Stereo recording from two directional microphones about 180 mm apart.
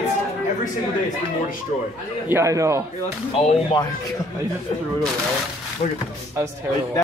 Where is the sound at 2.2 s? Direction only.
15° right (ahead or behind).